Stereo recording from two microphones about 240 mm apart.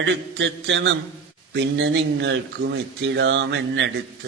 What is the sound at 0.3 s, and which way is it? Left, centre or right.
Speech, right.